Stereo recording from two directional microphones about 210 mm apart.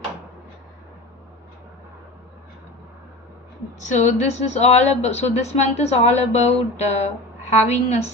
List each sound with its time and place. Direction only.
3.8 s a woman's voice: 35° left (ahead or behind)